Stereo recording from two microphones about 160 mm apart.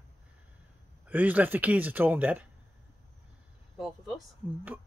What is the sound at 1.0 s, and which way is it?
A man's voice, 10° right (ahead or behind).